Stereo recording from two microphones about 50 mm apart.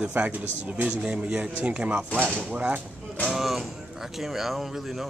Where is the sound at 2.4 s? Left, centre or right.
Right.